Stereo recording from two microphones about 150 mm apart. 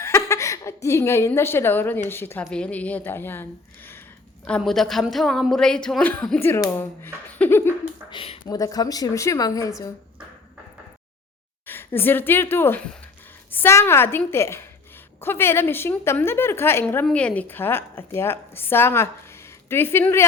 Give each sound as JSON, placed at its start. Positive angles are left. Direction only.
{"t": 0.0, "sound": "a sound", "side_deg": 20}
{"t": 2.0, "sound": "a woman's voice", "side_deg": 15}
{"t": 4.4, "sound": "a woman's voice", "side_deg": 5}
{"t": 8.1, "sound": "a sound", "side_deg": 40}
{"t": 8.4, "sound": "a woman's voice", "side_deg": 25}
{"t": 11.6, "sound": "a woman's voice", "side_deg": 15}